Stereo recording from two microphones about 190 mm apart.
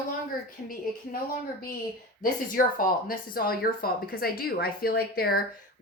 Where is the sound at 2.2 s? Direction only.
45° left (ahead or behind).